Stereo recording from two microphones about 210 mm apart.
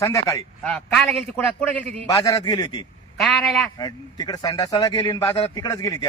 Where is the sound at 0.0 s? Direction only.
15° left (ahead or behind).